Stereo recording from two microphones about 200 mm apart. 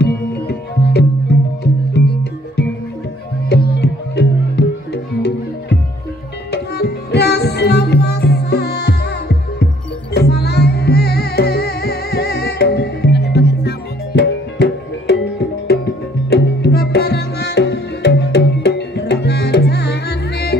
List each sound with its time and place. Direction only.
0.0 s music: 55° left (ahead or behind)
3.4 s music: 50° left (ahead or behind)